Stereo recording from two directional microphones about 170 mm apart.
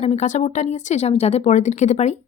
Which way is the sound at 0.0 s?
40° left (ahead or behind).